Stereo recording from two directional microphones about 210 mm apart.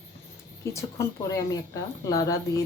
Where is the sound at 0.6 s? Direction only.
15° left (ahead or behind).